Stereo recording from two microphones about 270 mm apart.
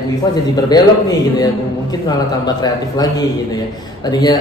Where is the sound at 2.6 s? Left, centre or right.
Centre.